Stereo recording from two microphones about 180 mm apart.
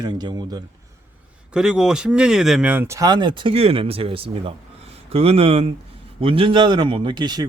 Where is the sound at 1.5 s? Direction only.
5° right (ahead or behind).